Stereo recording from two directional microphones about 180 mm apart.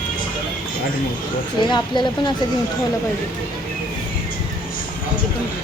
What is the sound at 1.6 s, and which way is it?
Speech, 25° left (ahead or behind).